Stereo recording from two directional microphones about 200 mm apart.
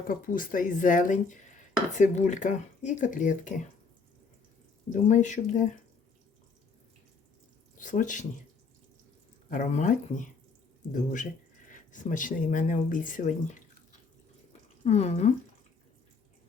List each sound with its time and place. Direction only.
0.1 s speech: 45° left (ahead or behind)
5.0 s speech: 35° left (ahead or behind)
7.8 s speech: 40° left (ahead or behind)
9.5 s speech: 40° left (ahead or behind)
14.8 s speech: 35° left (ahead or behind)